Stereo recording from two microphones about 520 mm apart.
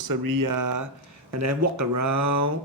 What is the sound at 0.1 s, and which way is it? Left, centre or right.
Speech, right.